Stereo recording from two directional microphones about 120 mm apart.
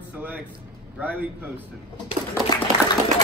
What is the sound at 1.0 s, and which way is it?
Speech, 15° right (ahead or behind).